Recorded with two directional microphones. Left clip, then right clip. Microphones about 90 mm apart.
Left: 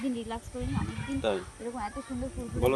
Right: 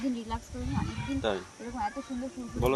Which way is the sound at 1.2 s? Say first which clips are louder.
Left 1 dB; 50° left (ahead or behind).